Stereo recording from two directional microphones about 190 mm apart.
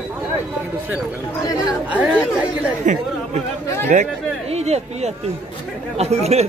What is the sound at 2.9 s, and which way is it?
Speech, 40° right (ahead or behind).